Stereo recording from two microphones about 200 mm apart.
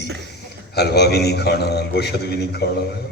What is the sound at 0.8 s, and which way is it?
A man's voice, 55° left (ahead or behind).